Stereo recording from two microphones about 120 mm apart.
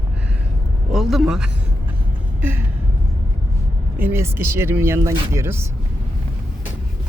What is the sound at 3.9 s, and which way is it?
Speech, 20° right (ahead or behind).